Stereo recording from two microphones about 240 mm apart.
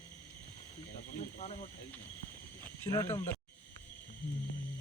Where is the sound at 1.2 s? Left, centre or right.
Left.